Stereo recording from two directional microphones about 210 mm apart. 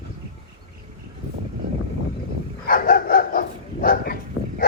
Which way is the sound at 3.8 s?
45° left (ahead or behind).